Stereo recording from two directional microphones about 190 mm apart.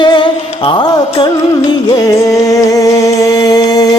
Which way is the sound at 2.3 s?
15° left (ahead or behind).